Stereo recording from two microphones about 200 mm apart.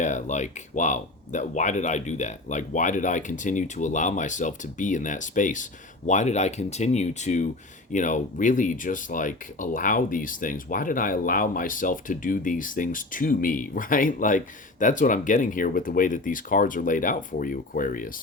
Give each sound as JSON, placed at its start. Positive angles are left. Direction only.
{"t": 0.0, "sound": "speech", "side_deg": 40}